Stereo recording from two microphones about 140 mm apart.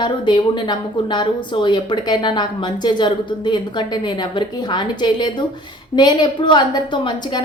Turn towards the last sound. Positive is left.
turn(degrees=35)  # may be behind; listen again after turning